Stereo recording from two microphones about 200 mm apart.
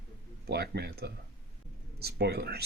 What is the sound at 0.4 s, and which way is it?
Speech, 55° right (ahead or behind).